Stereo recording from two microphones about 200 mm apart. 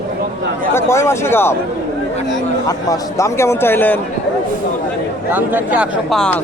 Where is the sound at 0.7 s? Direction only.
15° left (ahead or behind).